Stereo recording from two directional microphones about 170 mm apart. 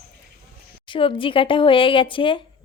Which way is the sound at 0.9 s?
30° left (ahead or behind).